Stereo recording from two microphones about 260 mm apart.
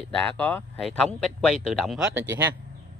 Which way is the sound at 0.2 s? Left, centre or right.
Centre.